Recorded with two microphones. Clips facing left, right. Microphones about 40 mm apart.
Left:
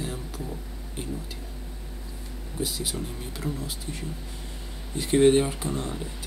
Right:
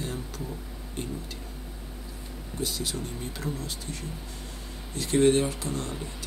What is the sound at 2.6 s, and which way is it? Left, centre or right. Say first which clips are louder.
Speech: left 1 dB; centre.